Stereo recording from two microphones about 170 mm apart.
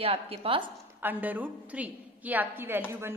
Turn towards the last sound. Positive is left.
turn(degrees=-15)  # may be behind; listen again after turning